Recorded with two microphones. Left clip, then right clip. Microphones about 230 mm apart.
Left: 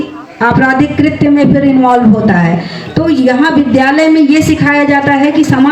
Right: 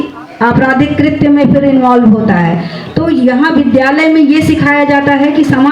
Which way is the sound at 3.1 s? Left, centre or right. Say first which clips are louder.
Even; left.